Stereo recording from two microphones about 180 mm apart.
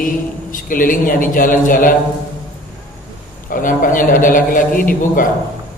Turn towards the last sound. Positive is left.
turn(degrees=50)  # may be behind; listen again after turning